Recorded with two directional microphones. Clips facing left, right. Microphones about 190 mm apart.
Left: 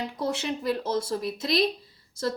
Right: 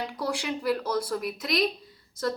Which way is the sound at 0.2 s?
25° left (ahead or behind).